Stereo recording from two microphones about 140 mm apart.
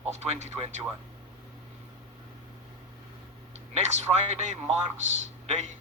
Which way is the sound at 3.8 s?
55° right (ahead or behind).